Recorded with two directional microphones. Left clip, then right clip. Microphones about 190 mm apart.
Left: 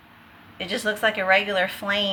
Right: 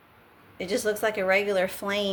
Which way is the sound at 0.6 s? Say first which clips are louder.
Left 3 dB; 80° right.